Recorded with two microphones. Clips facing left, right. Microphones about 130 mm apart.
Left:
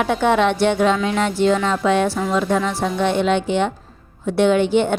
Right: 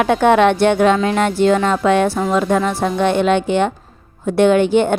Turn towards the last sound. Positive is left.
turn(degrees=-50)  # may be behind; listen again after turning